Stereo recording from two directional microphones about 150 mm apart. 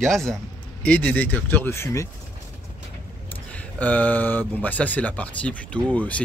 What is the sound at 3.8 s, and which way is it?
Speech, 10° left (ahead or behind).